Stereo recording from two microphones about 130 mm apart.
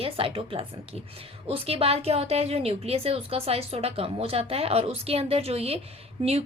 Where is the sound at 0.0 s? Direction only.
45° right (ahead or behind).